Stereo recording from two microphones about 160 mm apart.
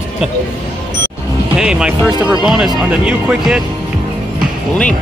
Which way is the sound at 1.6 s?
5° right (ahead or behind).